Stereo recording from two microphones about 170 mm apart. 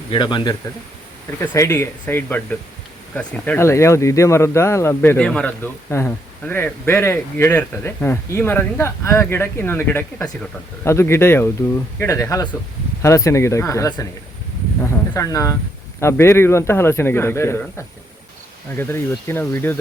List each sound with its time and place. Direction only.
0.1 s speech: 25° left (ahead or behind)
14.8 s a sound: 15° left (ahead or behind)
16.0 s speech: 15° left (ahead or behind)